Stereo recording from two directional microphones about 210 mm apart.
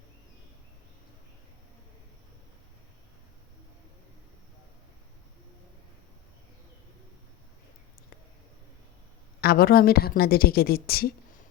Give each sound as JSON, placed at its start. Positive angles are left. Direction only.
{"t": 9.4, "sound": "a woman's voice", "side_deg": 45}